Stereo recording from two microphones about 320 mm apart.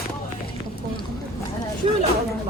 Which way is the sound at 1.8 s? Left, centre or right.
Centre.